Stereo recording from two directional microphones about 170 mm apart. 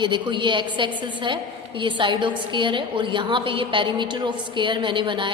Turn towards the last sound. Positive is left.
turn(degrees=-30)  # may be behind; listen again after turning